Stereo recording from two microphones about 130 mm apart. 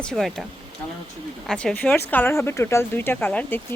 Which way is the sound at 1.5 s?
5° left (ahead or behind).